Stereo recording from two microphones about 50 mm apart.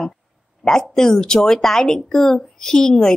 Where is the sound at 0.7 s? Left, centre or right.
Centre.